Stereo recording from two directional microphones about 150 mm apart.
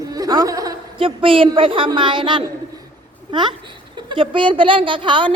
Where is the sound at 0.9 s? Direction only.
35° right (ahead or behind).